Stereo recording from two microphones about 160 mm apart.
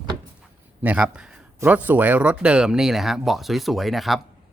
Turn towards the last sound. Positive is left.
turn(degrees=0)  # may be behind; listen again after turning